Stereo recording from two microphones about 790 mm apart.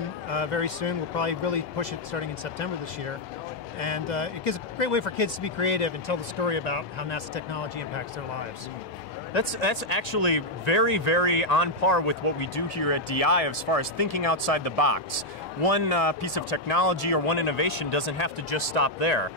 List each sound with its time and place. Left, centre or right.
0.3 s speech: left
3.8 s speech: left